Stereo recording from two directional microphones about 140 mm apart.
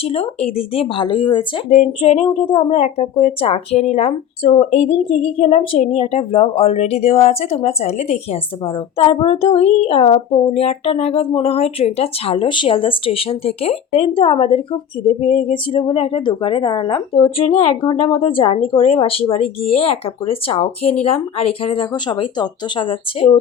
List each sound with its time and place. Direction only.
0.0 s speech: 45° left (ahead or behind)